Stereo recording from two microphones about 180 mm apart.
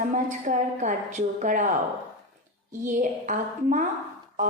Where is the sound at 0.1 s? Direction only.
45° right (ahead or behind).